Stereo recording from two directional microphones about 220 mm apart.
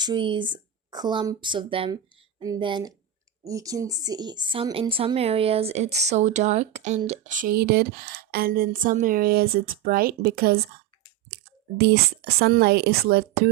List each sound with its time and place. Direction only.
0.0 s speech: 20° right (ahead or behind); by 10.6 s 45° right (ahead or behind)
11.8 s speech: 45° right (ahead or behind)